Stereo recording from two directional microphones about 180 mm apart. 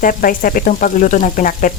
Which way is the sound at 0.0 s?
50° left (ahead or behind).